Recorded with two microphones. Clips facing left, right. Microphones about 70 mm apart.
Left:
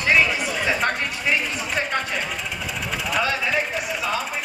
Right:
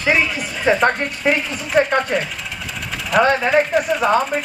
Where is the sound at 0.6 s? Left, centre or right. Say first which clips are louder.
Right 9 dB; right.